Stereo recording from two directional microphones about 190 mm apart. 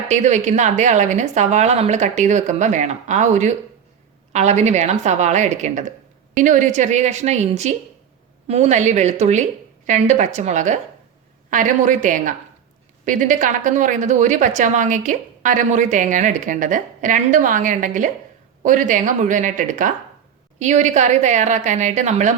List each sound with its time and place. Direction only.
0.1 s a woman's voice: 40° right (ahead or behind)